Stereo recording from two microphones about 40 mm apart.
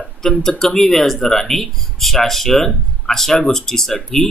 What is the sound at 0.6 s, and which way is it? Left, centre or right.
Speech, centre.